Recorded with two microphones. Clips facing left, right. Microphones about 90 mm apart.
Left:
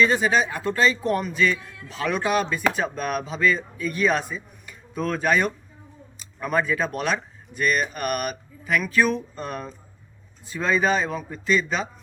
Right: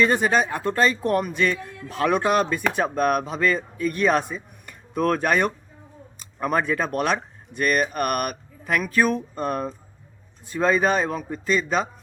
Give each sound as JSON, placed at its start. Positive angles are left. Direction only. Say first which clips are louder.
{"t": 0.0, "sound": "speech", "louder": "even", "side_deg": -50}